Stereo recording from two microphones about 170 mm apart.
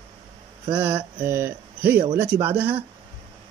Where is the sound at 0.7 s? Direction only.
10° right (ahead or behind).